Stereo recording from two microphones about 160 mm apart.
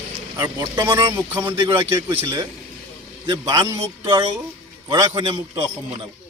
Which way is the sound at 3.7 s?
30° right (ahead or behind).